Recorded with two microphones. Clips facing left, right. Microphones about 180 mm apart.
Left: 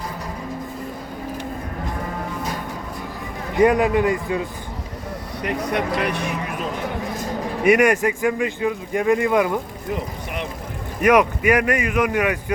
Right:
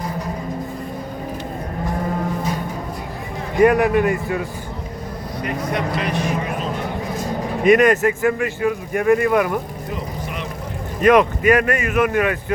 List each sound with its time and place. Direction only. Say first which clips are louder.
3.6 s speech: right 2 dB; 20° left (ahead or behind)
5.4 s speech: even; 60° left (ahead or behind)
7.6 s speech: right 2 dB; 10° left (ahead or behind)
11.0 s speech: right 2 dB; 10° left (ahead or behind)